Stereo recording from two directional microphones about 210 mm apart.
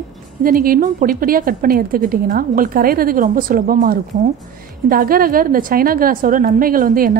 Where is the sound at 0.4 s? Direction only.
40° right (ahead or behind).